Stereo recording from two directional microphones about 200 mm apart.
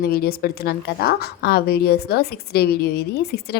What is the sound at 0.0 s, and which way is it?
A woman's voice, 50° left (ahead or behind).